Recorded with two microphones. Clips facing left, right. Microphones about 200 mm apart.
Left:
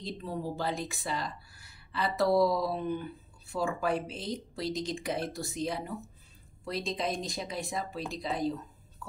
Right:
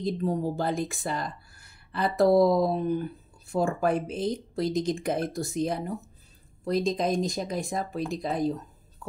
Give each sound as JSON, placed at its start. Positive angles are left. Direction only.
{"t": 0.0, "sound": "a woman's voice", "side_deg": -45}